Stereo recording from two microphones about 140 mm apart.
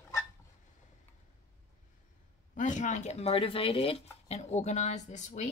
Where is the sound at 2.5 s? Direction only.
60° left (ahead or behind); by 4.0 s 40° left (ahead or behind).